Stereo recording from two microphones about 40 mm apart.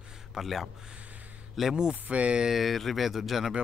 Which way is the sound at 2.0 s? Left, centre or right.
Right.